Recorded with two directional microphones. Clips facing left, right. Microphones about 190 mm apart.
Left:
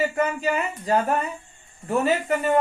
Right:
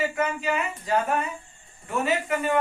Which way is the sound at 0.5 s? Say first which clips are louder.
Left 3 dB; 35° left (ahead or behind).